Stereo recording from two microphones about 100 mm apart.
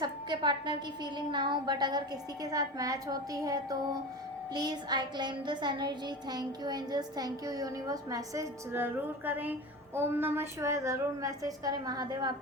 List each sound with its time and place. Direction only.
0.0 s a woman's voice: 50° right (ahead or behind)
4.5 s a sound: 45° right (ahead or behind)
8.7 s a woman's voice: 20° right (ahead or behind); by 12.3 s 40° right (ahead or behind)